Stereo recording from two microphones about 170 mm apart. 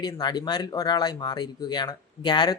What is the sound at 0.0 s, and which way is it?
Speech, 25° left (ahead or behind).